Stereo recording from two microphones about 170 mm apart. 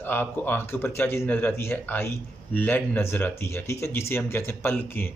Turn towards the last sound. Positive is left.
turn(degrees=15)  # may be behind; listen again after turning